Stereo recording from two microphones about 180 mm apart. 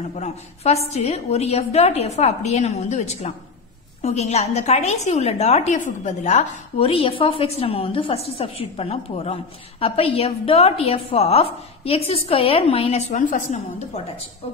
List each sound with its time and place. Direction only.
0.1 s a woman's voice: 40° left (ahead or behind)